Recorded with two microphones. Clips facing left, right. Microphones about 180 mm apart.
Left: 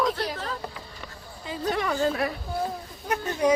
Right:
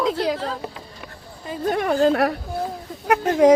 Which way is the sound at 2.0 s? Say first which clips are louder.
Right 8 dB; 70° right (ahead or behind).